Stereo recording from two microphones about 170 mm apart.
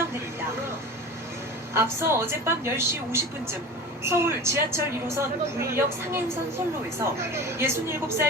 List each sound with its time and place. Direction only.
1.7 s a woman's voice: 15° right (ahead or behind)